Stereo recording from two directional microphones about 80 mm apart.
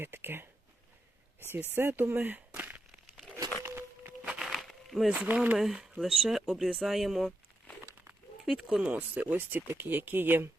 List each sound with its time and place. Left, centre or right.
0.0 s speech: right
1.5 s speech: right
3.6 s a sound: right
4.4 s a sound: centre
5.0 s speech: centre
5.5 s speech: centre
8.4 s speech: centre; by 10.5 s right